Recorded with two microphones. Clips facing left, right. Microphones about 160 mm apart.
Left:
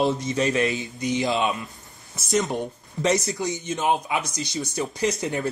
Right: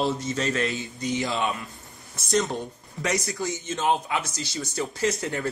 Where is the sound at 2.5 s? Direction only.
25° left (ahead or behind).